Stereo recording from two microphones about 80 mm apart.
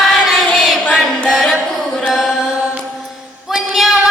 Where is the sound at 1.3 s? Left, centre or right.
Centre.